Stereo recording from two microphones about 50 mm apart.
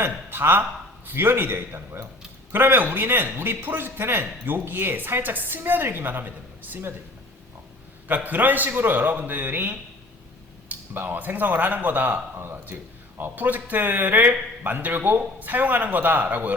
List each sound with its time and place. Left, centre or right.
0.3 s a man's voice: right
8.0 s speech: right
10.9 s speech: right
12.4 s a man's voice: right
13.3 s speech: right